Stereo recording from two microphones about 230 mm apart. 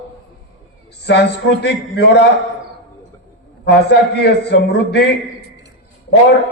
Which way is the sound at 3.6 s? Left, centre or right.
Left.